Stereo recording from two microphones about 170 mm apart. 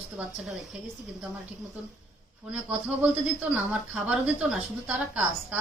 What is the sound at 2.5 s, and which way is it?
A woman's voice, 10° right (ahead or behind).